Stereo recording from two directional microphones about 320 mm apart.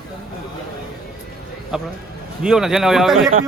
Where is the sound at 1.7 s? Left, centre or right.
Centre.